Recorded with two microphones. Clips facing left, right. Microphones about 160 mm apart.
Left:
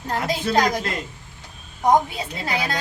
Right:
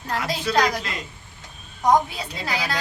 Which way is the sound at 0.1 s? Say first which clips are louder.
Left 2 dB; 45° left (ahead or behind).